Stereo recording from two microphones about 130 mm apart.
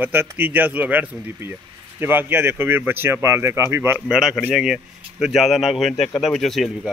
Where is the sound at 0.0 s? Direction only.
15° right (ahead or behind).